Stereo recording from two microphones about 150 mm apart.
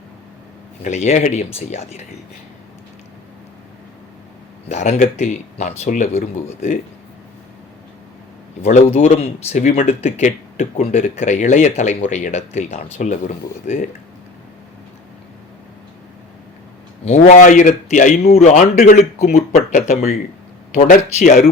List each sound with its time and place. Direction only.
0.9 s speech: 50° left (ahead or behind)
4.7 s speech: 50° left (ahead or behind)
8.6 s speech: 55° left (ahead or behind)
17.1 s a man's voice: 55° left (ahead or behind)